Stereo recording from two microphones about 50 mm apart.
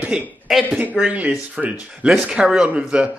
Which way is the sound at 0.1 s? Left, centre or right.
Right.